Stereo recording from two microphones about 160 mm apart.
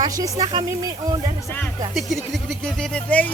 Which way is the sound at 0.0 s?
30° right (ahead or behind).